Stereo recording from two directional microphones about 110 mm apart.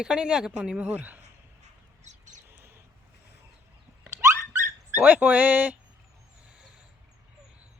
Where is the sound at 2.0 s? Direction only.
90° right.